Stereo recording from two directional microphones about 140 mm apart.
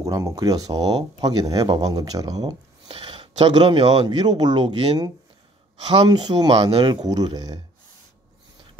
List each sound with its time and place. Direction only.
0.0 s speech: 20° right (ahead or behind); by 3.9 s 45° right (ahead or behind)
4.1 s speech: 30° right (ahead or behind)